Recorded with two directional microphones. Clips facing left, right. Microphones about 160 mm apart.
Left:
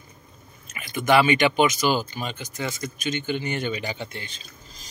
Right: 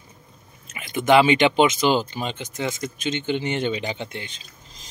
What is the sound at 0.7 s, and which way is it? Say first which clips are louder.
Speech: right 3 dB; 20° right (ahead or behind).